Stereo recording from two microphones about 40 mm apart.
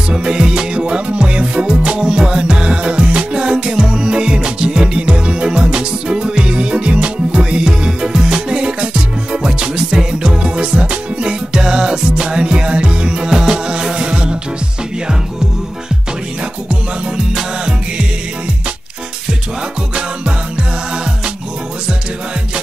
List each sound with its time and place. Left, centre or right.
0.1 s music: centre
11.5 s music: centre
17.3 s music: centre